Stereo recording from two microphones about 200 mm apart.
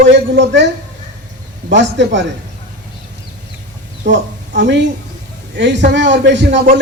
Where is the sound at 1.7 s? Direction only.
65° right (ahead or behind).